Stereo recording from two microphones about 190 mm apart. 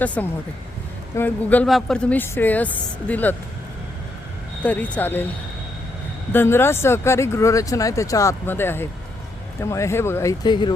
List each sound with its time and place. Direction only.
0.0 s speech: 10° left (ahead or behind)
4.6 s speech: 10° left (ahead or behind)
6.3 s speech: 10° left (ahead or behind)